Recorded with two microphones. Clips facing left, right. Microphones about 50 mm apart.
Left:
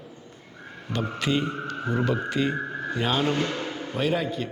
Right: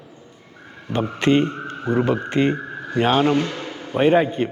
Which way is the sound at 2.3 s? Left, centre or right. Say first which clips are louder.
Right 6 dB; right.